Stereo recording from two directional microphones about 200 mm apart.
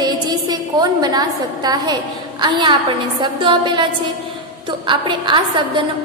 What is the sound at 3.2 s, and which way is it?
A woman's voice, 25° right (ahead or behind).